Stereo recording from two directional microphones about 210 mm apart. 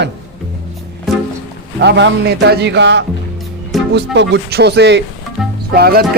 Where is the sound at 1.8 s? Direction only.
55° right (ahead or behind).